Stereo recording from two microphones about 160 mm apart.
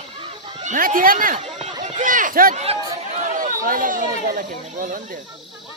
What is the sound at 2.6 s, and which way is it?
Chatter, 40° right (ahead or behind).